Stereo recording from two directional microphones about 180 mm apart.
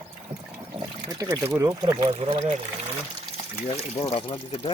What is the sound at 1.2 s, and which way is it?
Speech, 15° right (ahead or behind).